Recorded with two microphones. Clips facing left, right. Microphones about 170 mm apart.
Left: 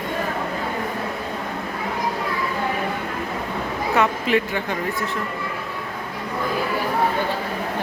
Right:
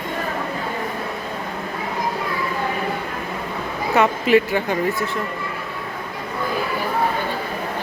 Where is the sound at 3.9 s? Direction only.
5° right (ahead or behind).